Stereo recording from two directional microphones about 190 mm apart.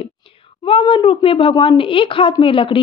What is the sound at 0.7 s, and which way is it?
A woman's voice, 30° left (ahead or behind).